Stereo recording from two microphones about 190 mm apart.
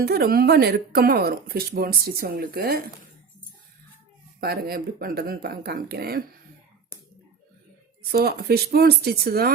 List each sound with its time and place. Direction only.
0.0 s speech: 55° right (ahead or behind)
4.4 s speech: 55° right (ahead or behind)
8.1 s speech: 55° right (ahead or behind)